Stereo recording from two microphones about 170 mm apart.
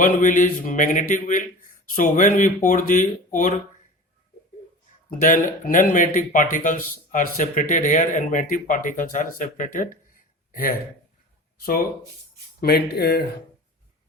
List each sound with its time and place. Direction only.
0.0 s a man's voice: 50° left (ahead or behind)
5.2 s a man's voice: 50° left (ahead or behind)
12.5 s speech: 70° left (ahead or behind)